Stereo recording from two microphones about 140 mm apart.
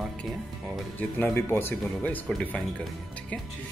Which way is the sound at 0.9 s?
10° left (ahead or behind).